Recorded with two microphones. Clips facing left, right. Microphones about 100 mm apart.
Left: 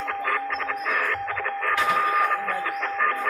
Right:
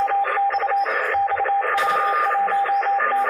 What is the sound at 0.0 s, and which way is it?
Radio, 30° right (ahead or behind).